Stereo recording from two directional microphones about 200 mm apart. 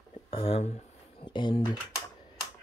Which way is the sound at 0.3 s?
30° left (ahead or behind).